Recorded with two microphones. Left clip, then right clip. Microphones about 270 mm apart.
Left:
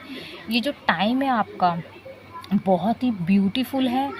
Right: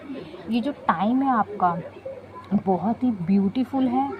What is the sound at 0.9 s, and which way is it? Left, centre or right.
Speech, left.